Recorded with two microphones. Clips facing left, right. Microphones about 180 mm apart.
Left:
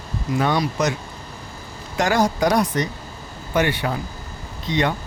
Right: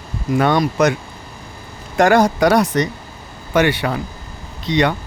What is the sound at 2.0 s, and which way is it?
Speech, 60° right (ahead or behind).